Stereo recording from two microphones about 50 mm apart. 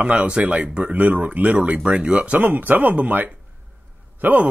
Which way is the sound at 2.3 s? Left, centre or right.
Right.